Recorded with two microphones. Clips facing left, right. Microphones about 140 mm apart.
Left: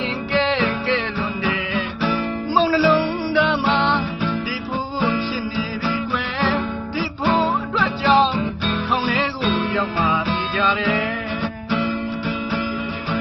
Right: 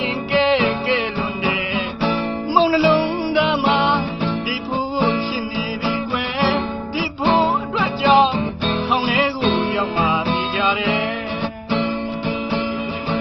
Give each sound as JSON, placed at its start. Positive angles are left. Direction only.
{"t": 0.3, "sound": "music", "side_deg": -15}
{"t": 6.4, "sound": "music", "side_deg": -15}
{"t": 11.7, "sound": "guitar", "side_deg": -25}